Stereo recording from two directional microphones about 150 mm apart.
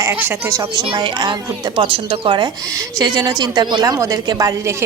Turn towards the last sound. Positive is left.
turn(degrees=-20)  # may be behind; listen again after turning